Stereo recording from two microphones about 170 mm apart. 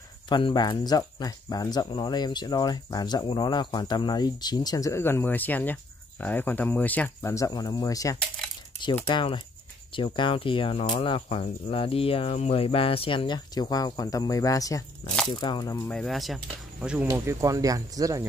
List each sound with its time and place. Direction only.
0.3 s speech: 30° left (ahead or behind)
15.9 s speech: centre (ahead or behind)
17.1 s speech: 20° right (ahead or behind)